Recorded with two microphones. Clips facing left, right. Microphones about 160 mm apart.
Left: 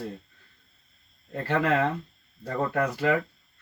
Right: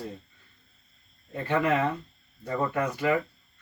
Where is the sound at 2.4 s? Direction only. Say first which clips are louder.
Left 1 dB; 60° left (ahead or behind).